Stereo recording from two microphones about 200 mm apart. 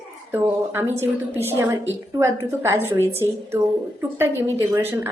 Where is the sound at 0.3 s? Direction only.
10° right (ahead or behind).